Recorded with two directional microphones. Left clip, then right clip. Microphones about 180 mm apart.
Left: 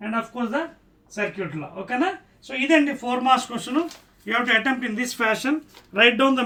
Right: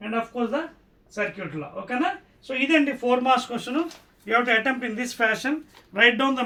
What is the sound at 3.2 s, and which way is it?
Speech, 20° right (ahead or behind).